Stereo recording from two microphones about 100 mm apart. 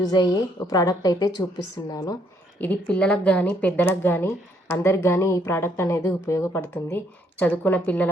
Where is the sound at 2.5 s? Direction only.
15° left (ahead or behind).